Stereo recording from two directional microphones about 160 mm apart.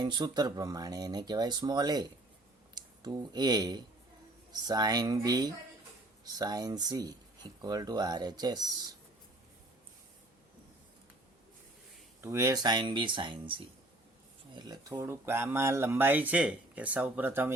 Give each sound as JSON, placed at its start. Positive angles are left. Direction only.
{"t": 0.0, "sound": "speech", "side_deg": -25}
{"t": 12.2, "sound": "speech", "side_deg": -20}